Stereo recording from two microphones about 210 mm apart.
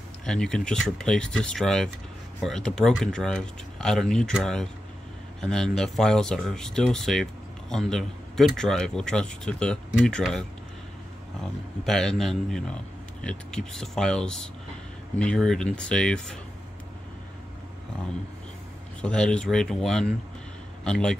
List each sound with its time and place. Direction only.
0.2 s a man's voice: 5° left (ahead or behind)
11.8 s speech: centre (ahead or behind)
18.9 s speech: 5° left (ahead or behind)